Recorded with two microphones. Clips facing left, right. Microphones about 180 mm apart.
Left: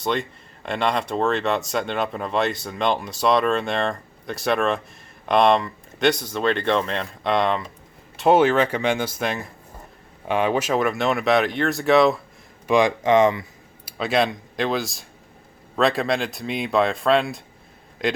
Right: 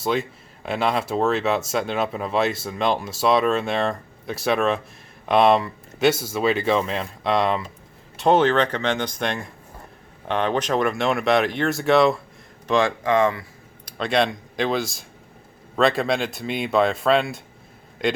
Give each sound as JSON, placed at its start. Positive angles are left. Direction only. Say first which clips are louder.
{"t": 0.0, "sound": "speech", "louder": "right 1 dB", "side_deg": -5}
{"t": 12.6, "sound": "speech", "louder": "left 2 dB", "side_deg": 15}
{"t": 13.8, "sound": "a man's voice", "louder": "even", "side_deg": 5}